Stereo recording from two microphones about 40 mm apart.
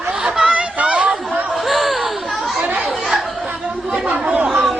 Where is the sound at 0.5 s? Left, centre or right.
Right.